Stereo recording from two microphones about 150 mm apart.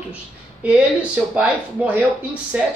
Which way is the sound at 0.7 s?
5° right (ahead or behind).